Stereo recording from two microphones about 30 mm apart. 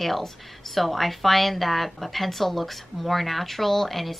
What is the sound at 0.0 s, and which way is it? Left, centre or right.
A woman's voice, centre.